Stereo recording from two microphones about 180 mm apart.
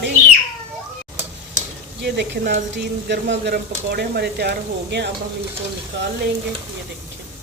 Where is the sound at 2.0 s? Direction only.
70° right (ahead or behind).